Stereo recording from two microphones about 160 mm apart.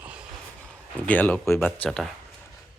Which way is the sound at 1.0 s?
10° left (ahead or behind).